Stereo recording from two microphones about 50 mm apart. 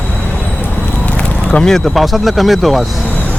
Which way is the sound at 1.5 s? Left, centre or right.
Centre.